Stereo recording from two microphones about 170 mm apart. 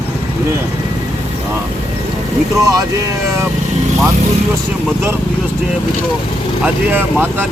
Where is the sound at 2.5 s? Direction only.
20° right (ahead or behind).